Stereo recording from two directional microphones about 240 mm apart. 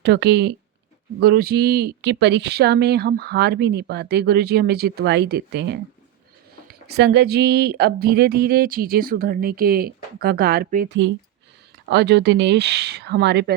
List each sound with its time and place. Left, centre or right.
0.0 s speech: right